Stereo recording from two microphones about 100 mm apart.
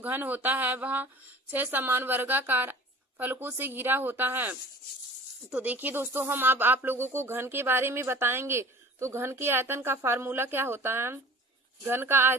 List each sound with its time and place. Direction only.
0.0 s speech: 20° right (ahead or behind)